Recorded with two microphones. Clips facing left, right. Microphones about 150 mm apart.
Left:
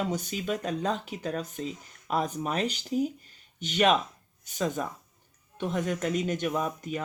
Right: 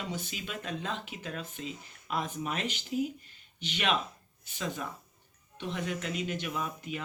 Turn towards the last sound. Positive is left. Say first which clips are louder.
# left 6 dB
turn(degrees=40)  # may be behind; listen again after turning